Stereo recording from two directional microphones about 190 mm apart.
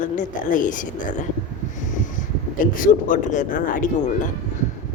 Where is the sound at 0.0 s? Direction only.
45° left (ahead or behind).